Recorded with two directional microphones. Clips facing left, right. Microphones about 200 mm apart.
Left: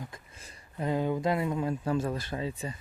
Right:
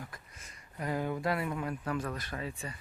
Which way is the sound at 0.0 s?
25° left (ahead or behind).